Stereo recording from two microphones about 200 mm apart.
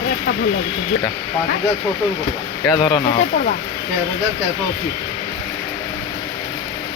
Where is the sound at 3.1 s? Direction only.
45° left (ahead or behind).